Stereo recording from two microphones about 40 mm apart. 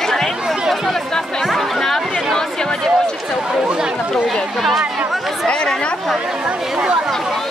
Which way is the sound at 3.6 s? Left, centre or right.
Right.